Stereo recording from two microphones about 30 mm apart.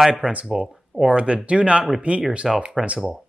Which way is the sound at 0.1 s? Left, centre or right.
Right.